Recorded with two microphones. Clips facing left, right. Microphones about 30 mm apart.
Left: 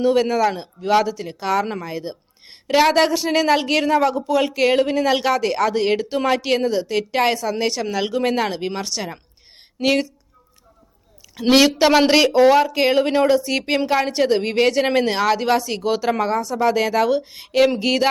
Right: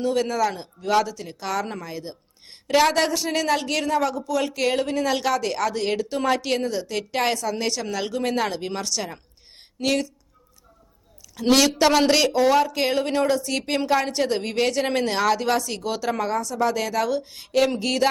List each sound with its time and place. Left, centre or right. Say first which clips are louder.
0.0 s speech: left 5 dB; left
11.3 s speech: left 4 dB; left